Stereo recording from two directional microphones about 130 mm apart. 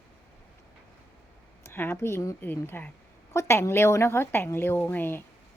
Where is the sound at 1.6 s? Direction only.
20° left (ahead or behind).